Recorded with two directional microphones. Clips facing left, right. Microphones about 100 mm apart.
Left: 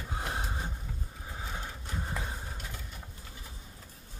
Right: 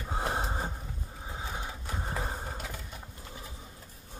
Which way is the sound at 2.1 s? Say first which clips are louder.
Right 4 dB; 35° right (ahead or behind).